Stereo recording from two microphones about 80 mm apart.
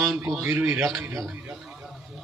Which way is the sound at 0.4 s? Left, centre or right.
Right.